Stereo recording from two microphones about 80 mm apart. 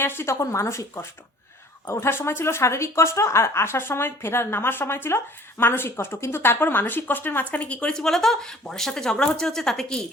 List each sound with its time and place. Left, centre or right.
0.0 s speech: left; by 10.1 s centre